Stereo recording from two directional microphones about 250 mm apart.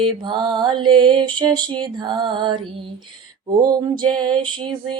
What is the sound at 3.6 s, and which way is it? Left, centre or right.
Mantra, centre.